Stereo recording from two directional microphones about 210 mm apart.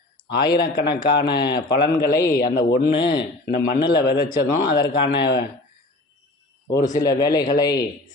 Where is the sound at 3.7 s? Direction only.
50° left (ahead or behind).